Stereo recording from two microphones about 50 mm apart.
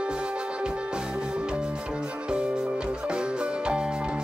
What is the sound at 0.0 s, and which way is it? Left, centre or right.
Music, centre.